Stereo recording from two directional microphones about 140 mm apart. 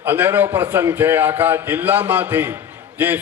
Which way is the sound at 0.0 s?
15° right (ahead or behind).